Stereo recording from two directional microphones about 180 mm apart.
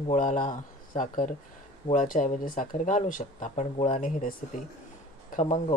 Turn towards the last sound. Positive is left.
turn(degrees=45)  # may be behind; listen again after turning